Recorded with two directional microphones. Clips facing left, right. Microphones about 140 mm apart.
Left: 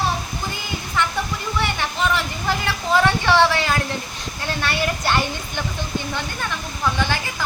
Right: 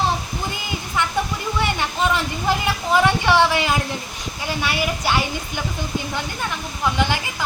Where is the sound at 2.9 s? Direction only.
15° right (ahead or behind).